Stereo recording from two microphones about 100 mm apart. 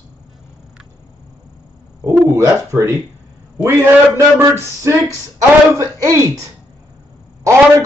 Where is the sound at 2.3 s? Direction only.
30° right (ahead or behind).